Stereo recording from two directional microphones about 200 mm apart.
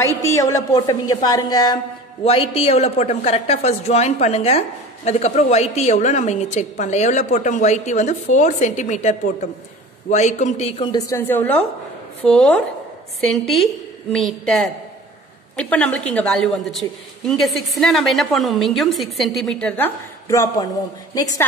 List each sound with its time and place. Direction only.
0.2 s a woman's voice: 15° left (ahead or behind)
20.2 s a man's voice: 15° left (ahead or behind)